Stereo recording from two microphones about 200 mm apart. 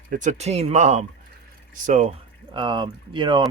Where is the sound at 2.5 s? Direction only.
25° right (ahead or behind).